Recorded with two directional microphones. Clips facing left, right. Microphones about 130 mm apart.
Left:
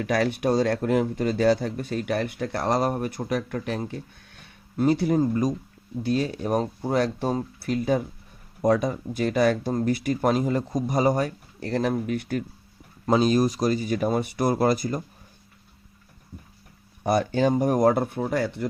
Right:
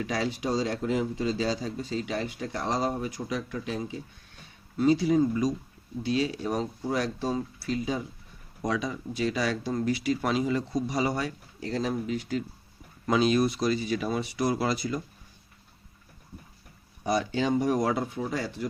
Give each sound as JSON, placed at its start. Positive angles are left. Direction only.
{"t": 0.0, "sound": "speech", "side_deg": 60}
{"t": 13.1, "sound": "speech", "side_deg": 40}
{"t": 17.0, "sound": "speech", "side_deg": 55}